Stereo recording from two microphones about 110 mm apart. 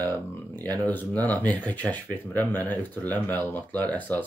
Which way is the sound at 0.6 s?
15° left (ahead or behind).